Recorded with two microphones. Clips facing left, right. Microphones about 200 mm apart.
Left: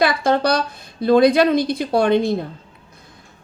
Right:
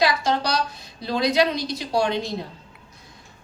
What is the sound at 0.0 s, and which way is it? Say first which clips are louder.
A woman's voice: left 5 dB; 55° left (ahead or behind).